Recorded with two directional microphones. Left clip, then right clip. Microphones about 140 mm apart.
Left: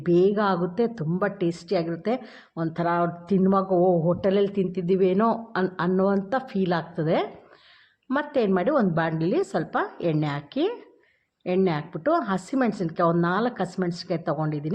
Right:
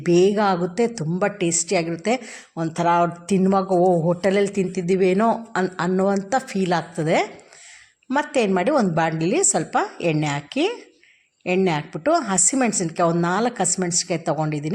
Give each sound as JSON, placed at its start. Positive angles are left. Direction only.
{"t": 0.0, "sound": "a woman's voice", "side_deg": -30}